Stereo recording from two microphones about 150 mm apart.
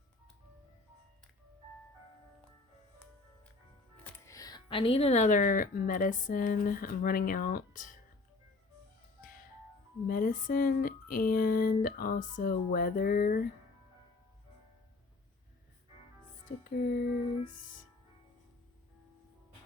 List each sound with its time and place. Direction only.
4.3 s a woman's voice: 25° left (ahead or behind); by 7.9 s 60° left (ahead or behind)
10.1 s speech: 65° left (ahead or behind)
16.6 s speech: 75° left (ahead or behind)